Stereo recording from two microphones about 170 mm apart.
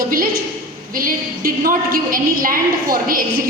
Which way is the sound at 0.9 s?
55° right (ahead or behind).